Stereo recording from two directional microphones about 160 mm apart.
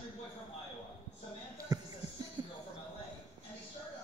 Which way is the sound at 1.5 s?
20° right (ahead or behind).